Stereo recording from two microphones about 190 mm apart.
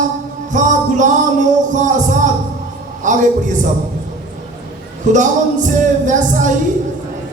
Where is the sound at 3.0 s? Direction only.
40° right (ahead or behind).